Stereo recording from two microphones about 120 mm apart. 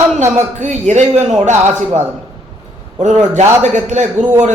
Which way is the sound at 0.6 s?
80° right.